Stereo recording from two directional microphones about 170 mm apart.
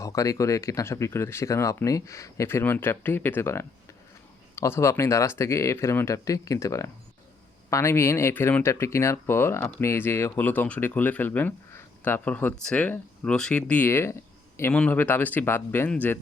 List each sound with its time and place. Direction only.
0.0 s speech: 20° left (ahead or behind)